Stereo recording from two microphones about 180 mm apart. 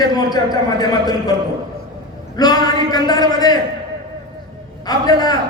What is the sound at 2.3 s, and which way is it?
A man's voice, 20° left (ahead or behind).